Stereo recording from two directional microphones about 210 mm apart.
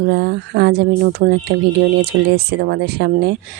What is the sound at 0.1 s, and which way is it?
Speech, 55° right (ahead or behind).